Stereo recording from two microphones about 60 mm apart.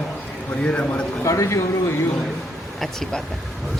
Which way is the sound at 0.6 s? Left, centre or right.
Centre.